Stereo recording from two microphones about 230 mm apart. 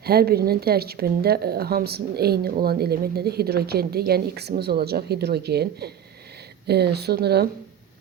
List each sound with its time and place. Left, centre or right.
0.0 s speech: right